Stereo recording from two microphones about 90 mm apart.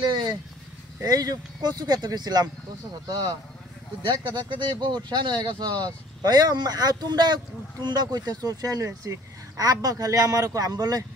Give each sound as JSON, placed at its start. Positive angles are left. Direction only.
{"t": 0.1, "sound": "vehicle", "side_deg": -55}
{"t": 1.0, "sound": "speech", "side_deg": -45}
{"t": 4.0, "sound": "speech", "side_deg": -60}